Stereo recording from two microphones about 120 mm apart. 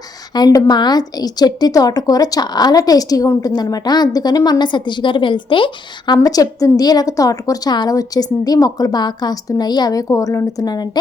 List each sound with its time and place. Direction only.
0.3 s a woman's voice: 35° left (ahead or behind)
6.2 s a woman's voice: 30° left (ahead or behind)